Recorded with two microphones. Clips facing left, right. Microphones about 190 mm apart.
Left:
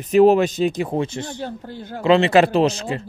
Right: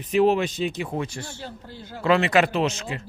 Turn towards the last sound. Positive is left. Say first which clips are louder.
# left 6 dB
turn(degrees=35)  # may be behind; listen again after turning